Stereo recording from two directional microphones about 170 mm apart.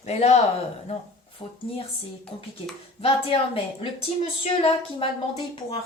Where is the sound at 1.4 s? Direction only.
25° left (ahead or behind).